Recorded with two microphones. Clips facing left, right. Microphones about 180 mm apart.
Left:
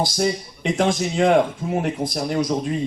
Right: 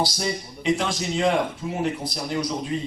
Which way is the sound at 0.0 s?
50° left (ahead or behind).